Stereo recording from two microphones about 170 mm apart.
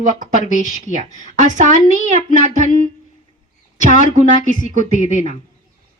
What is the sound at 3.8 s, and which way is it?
Speech, 50° right (ahead or behind).